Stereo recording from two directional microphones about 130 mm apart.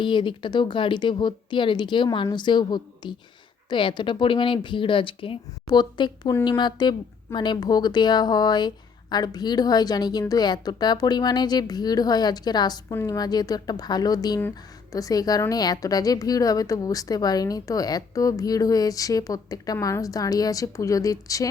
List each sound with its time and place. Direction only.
0.0 s a woman's voice: 40° left (ahead or behind)
12.9 s a woman's voice: 20° left (ahead or behind)
13.1 s a woman's voice: 30° left (ahead or behind)